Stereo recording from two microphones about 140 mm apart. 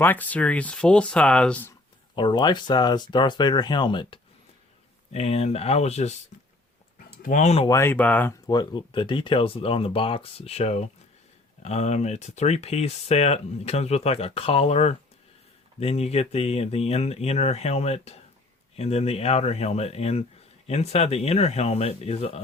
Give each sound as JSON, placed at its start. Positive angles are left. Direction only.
{"t": 0.0, "sound": "speech", "side_deg": 10}
{"t": 2.1, "sound": "speech", "side_deg": 35}
{"t": 5.1, "sound": "speech", "side_deg": 45}
{"t": 7.2, "sound": "speech", "side_deg": 65}
{"t": 7.7, "sound": "speech", "side_deg": 15}
{"t": 8.4, "sound": "speech", "side_deg": 30}